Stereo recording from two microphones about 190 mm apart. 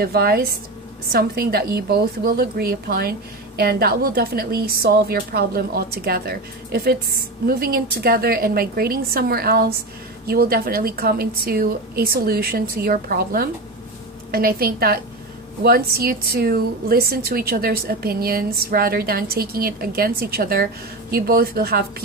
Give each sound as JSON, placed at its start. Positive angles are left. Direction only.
{"t": 0.0, "sound": "a woman's voice", "side_deg": -55}